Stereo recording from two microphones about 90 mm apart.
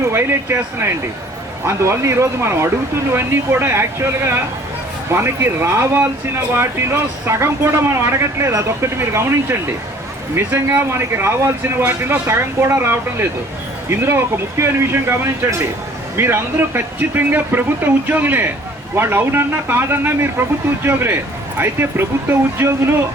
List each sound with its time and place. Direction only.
0.0 s speech: 30° right (ahead or behind)